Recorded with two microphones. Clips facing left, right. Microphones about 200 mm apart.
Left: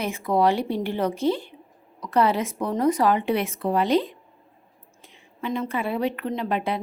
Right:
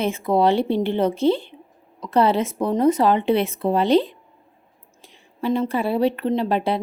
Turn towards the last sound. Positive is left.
turn(degrees=-30)  # may be behind; listen again after turning